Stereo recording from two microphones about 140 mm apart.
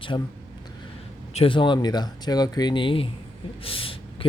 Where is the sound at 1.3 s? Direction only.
45° left (ahead or behind).